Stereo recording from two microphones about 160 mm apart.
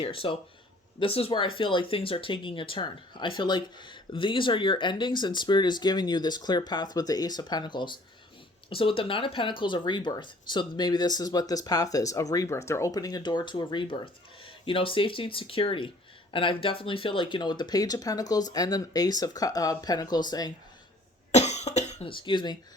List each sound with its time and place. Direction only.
0.0 s speech: 35° left (ahead or behind)
21.3 s cough: 45° left (ahead or behind)